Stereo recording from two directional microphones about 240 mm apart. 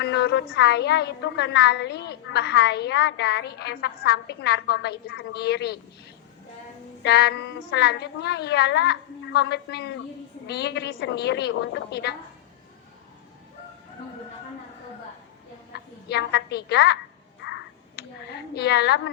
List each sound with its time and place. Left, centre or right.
0.0 s a woman's voice: left
7.0 s a woman's voice: left
16.0 s a woman's voice: left
17.4 s a sound: left
18.3 s a woman's voice: left